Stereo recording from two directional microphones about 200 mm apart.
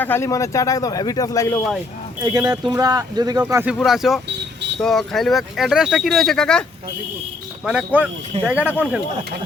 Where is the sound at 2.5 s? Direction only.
20° right (ahead or behind).